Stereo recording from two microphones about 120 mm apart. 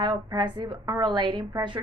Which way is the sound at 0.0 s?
40° right (ahead or behind).